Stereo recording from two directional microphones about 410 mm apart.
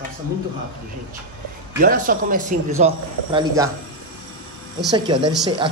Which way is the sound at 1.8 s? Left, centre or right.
Centre.